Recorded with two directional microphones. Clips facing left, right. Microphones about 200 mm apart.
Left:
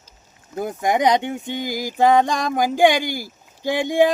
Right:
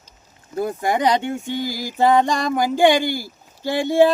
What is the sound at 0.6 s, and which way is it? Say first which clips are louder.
Speech: even; 15° left (ahead or behind).